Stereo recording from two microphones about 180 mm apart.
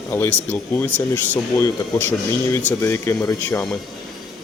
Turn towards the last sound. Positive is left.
turn(degrees=15)  # may be behind; listen again after turning